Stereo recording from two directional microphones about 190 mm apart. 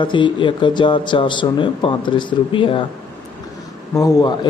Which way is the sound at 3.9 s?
20° left (ahead or behind).